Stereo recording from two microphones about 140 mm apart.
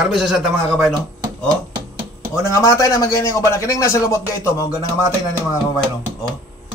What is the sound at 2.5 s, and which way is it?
A man's voice, 20° left (ahead or behind).